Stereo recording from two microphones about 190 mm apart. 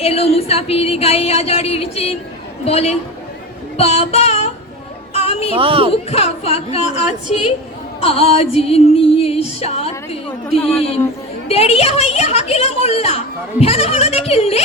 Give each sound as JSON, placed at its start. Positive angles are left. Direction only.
{"t": 0.0, "sound": "a woman's voice", "side_deg": 30}
{"t": 5.1, "sound": "music", "side_deg": 30}
{"t": 5.5, "sound": "speech", "side_deg": -30}
{"t": 6.1, "sound": "a woman's voice", "side_deg": 30}
{"t": 8.0, "sound": "a woman's voice", "side_deg": 30}